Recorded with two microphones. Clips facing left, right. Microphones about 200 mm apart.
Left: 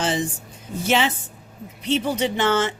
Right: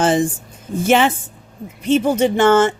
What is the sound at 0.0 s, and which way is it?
Speech, 50° right (ahead or behind).